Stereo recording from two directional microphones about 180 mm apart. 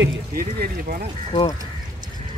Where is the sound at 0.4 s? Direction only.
55° right (ahead or behind).